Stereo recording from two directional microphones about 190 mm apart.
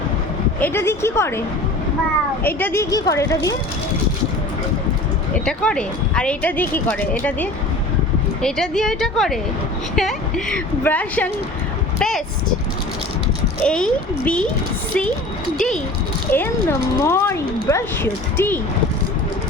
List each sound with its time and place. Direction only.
0.6 s speech: 15° left (ahead or behind)
2.5 s speech: 10° left (ahead or behind)
5.5 s a woman's voice: 5° left (ahead or behind)
11.9 s a sound: centre (ahead or behind)
13.7 s a woman's voice: 5° left (ahead or behind)
16.3 s speech: 10° left (ahead or behind)